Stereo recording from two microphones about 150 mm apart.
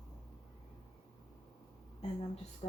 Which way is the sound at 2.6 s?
40° left (ahead or behind).